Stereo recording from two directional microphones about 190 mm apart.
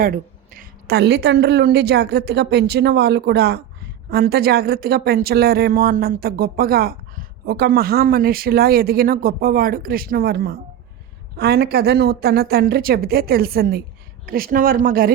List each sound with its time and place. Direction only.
0.0 s a woman's voice: 50° right (ahead or behind)